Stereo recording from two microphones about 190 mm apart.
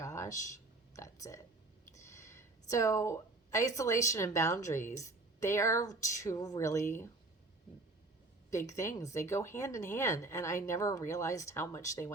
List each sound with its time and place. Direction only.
0.0 s a sound: 15° left (ahead or behind)
1.9 s a woman's voice: 15° left (ahead or behind)
8.4 s a woman's voice: 15° left (ahead or behind)